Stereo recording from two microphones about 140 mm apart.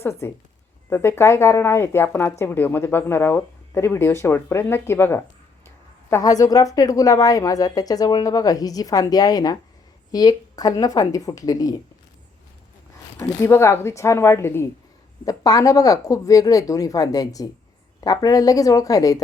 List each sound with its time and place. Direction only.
0.0 s a woman's voice: 20° left (ahead or behind)
13.1 s a woman's voice: 20° left (ahead or behind)